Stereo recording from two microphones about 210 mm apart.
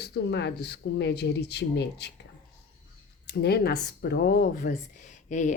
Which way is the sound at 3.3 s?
50° left (ahead or behind).